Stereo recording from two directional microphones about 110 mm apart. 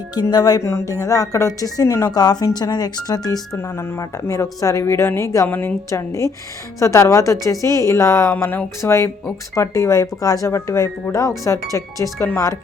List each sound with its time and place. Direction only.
0.1 s speech: 40° left (ahead or behind)
3.8 s a woman's voice: 25° left (ahead or behind)
5.9 s a woman's voice: 30° left (ahead or behind)